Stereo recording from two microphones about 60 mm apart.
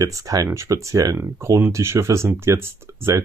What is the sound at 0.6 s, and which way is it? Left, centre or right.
Speech, right.